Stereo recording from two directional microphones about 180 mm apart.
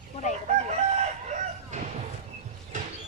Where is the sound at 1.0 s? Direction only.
40° right (ahead or behind).